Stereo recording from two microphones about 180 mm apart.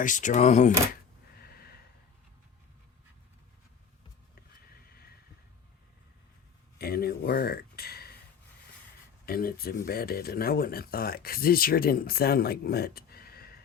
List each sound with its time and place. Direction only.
0.0 s speech: 45° left (ahead or behind)
1.4 s snort: 60° left (ahead or behind)
6.7 s a sound: 60° left (ahead or behind)
9.2 s speech: 55° left (ahead or behind)